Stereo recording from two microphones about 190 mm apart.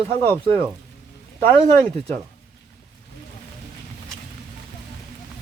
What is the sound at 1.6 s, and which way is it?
Speech, 30° right (ahead or behind).